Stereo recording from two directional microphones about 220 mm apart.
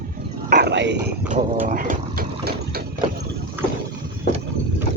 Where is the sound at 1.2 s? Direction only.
35° right (ahead or behind).